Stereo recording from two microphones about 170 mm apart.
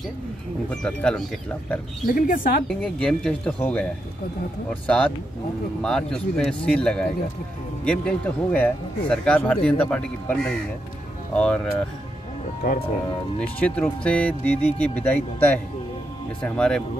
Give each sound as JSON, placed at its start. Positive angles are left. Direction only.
{"t": 0.7, "sound": "speech", "side_deg": 5}
{"t": 2.1, "sound": "speech", "side_deg": 55}
{"t": 2.7, "sound": "speech", "side_deg": 5}
{"t": 13.4, "sound": "speech", "side_deg": 10}